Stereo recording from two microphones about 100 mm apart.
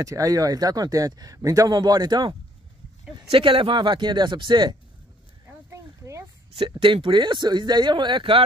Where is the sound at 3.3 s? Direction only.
65° right (ahead or behind).